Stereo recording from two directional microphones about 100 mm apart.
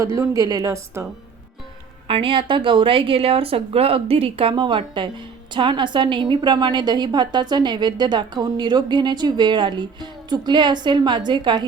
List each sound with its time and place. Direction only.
0.0 s a woman's voice: 30° right (ahead or behind)
2.0 s a woman's voice: 60° right (ahead or behind)